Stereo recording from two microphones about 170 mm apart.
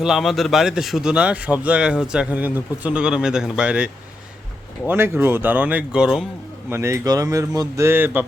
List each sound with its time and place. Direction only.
0.0 s a man's voice: centre (ahead or behind)
4.9 s speech: 15° right (ahead or behind)
6.7 s speech: 15° right (ahead or behind)